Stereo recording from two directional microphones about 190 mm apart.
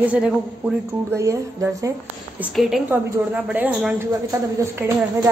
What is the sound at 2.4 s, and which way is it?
A woman's voice, centre (ahead or behind).